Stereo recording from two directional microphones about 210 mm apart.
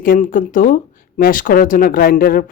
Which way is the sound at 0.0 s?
40° left (ahead or behind).